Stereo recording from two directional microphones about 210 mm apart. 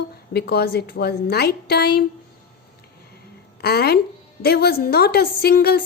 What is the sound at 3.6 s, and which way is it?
A woman's voice, 50° left (ahead or behind).